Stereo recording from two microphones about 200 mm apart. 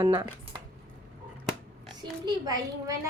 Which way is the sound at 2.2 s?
20° right (ahead or behind).